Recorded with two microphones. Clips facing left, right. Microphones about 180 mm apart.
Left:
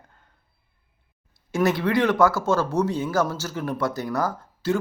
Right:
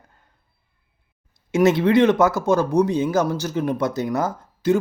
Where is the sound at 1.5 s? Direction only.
20° right (ahead or behind).